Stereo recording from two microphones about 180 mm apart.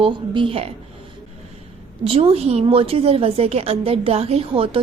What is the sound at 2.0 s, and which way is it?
A woman's voice, 35° right (ahead or behind).